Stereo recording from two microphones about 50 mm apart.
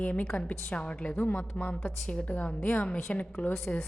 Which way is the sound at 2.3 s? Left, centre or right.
Left.